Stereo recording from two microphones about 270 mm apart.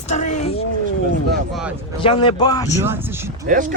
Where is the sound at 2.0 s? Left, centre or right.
Centre.